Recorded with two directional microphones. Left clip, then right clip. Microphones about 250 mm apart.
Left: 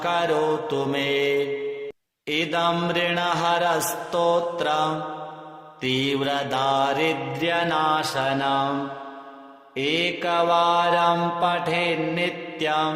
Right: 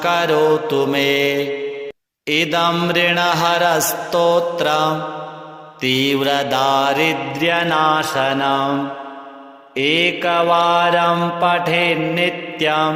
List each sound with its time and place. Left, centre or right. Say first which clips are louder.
0.0 s mantra: right 7 dB; right